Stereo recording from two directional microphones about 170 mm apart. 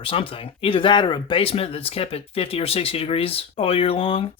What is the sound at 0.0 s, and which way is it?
Speech, 30° left (ahead or behind).